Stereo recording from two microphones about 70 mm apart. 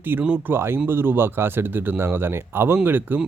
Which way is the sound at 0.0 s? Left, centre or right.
Right.